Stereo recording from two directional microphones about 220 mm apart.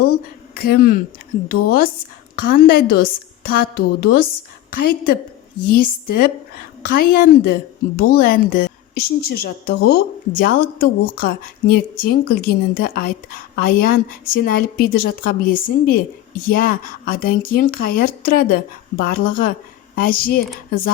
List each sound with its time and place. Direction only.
0.5 s a woman's voice: 45° left (ahead or behind)